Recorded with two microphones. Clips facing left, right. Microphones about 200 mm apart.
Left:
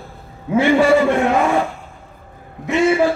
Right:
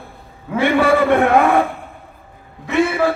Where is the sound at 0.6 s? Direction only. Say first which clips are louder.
Left 1 dB; 60° right (ahead or behind).